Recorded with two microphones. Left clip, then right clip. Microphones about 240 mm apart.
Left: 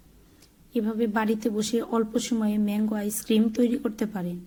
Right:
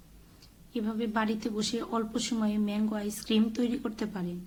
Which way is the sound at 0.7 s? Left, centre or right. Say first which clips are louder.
Left 6 dB; centre.